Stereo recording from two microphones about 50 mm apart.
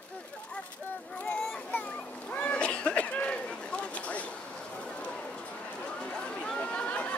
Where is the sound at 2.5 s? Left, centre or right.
Left.